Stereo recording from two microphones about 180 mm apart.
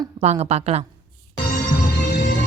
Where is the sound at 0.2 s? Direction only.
35° right (ahead or behind).